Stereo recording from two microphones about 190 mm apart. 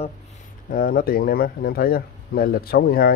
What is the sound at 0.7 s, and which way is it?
Speech, 45° left (ahead or behind).